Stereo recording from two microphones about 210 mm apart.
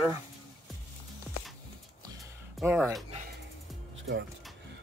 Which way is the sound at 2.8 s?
Centre (ahead or behind).